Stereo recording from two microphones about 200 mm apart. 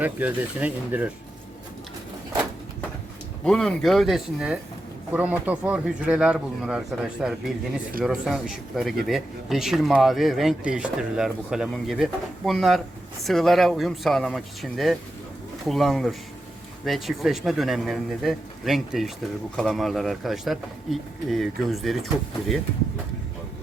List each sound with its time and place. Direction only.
0.0 s speech: 10° right (ahead or behind)
3.4 s speech: 5° left (ahead or behind)